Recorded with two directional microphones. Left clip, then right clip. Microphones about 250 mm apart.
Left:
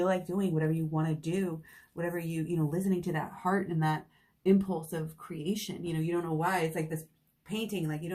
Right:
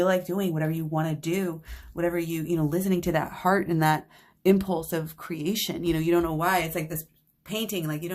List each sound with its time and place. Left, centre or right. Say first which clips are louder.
0.0 s speech: right 6 dB; right